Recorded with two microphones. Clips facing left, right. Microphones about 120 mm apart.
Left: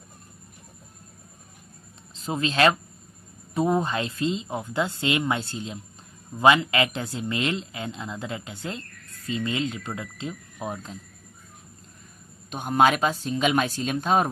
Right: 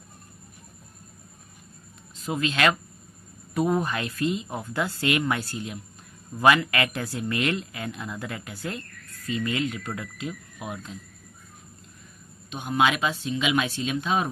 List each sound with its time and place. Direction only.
2.1 s speech: 30° left (ahead or behind)
12.5 s speech: 45° left (ahead or behind)